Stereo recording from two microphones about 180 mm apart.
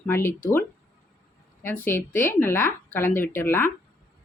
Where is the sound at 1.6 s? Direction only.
10° left (ahead or behind).